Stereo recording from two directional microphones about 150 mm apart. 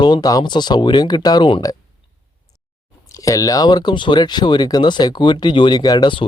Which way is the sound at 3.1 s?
20° left (ahead or behind).